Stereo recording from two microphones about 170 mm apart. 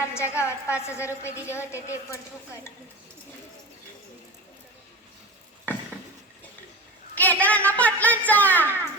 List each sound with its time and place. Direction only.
0.0 s a woman's voice: 15° left (ahead or behind)
7.2 s speech: 10° left (ahead or behind)